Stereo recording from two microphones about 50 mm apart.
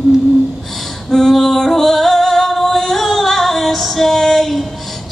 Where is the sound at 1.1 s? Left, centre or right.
Centre.